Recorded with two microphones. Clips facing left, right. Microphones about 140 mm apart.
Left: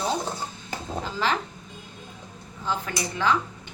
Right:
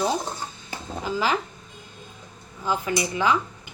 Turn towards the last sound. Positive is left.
turn(degrees=-10)  # may be behind; listen again after turning